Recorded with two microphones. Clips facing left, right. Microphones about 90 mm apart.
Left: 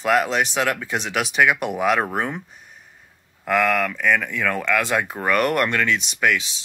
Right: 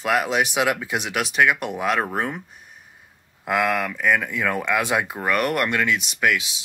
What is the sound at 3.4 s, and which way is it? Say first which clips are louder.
Speech: left 2 dB; 10° right (ahead or behind).